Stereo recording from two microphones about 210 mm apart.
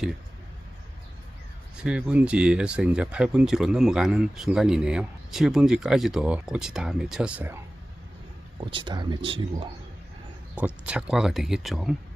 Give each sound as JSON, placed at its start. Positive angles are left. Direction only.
{"t": 1.7, "sound": "speech", "side_deg": -5}
{"t": 8.6, "sound": "speech", "side_deg": -20}
{"t": 10.5, "sound": "speech", "side_deg": -5}